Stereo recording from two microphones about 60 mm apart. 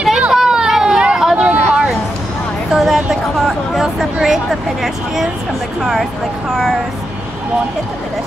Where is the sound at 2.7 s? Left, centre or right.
Centre.